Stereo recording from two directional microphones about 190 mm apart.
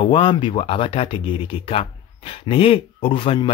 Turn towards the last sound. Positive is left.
turn(degrees=30)  # may be behind; listen again after turning